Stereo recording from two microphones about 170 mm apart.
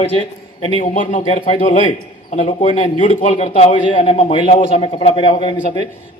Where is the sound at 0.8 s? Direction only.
50° left (ahead or behind).